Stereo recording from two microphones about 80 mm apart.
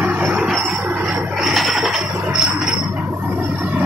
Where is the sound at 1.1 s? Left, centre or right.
Centre.